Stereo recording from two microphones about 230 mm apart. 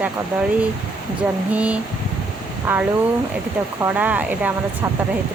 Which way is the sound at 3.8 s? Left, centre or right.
Centre.